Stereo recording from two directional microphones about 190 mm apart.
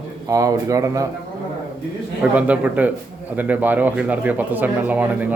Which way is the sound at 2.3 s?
10° right (ahead or behind).